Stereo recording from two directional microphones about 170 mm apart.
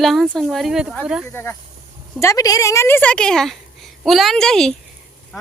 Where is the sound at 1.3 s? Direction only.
15° left (ahead or behind).